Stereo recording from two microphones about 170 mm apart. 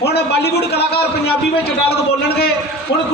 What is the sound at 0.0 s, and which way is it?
A man's voice, 75° left (ahead or behind).